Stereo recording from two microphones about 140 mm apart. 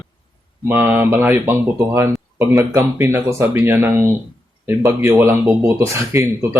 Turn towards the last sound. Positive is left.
turn(degrees=-20)  # may be behind; listen again after turning